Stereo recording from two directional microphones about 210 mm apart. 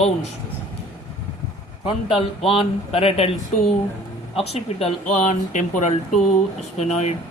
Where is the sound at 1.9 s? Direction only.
25° left (ahead or behind).